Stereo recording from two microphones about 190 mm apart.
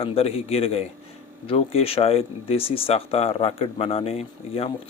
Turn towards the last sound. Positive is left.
turn(degrees=30)  # may be behind; listen again after turning